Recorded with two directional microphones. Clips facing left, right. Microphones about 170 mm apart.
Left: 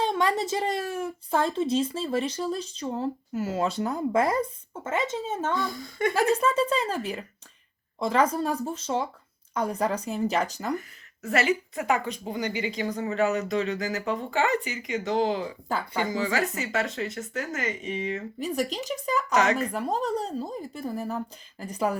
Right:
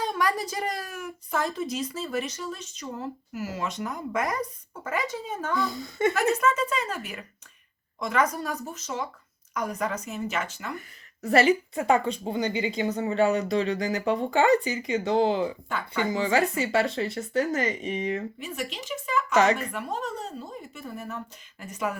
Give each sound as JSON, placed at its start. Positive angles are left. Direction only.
{"t": 0.0, "sound": "a woman's voice", "side_deg": 25}
{"t": 5.7, "sound": "a woman's voice", "side_deg": -25}
{"t": 6.1, "sound": "a woman's voice", "side_deg": 30}
{"t": 11.2, "sound": "a woman's voice", "side_deg": -35}
{"t": 15.7, "sound": "a woman's voice", "side_deg": 25}
{"t": 16.0, "sound": "speech", "side_deg": -25}
{"t": 18.3, "sound": "a woman's voice", "side_deg": 40}